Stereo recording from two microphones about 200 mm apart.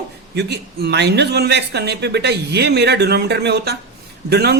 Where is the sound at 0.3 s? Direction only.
55° right (ahead or behind).